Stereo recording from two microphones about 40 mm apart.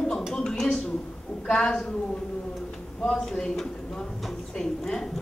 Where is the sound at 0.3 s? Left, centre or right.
Centre.